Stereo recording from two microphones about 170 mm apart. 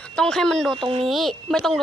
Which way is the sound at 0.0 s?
5° left (ahead or behind).